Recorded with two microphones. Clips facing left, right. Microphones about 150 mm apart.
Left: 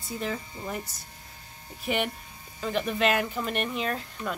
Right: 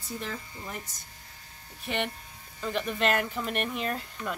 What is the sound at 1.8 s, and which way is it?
Speech, 5° left (ahead or behind).